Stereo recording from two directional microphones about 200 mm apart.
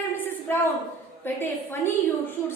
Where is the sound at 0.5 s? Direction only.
10° left (ahead or behind).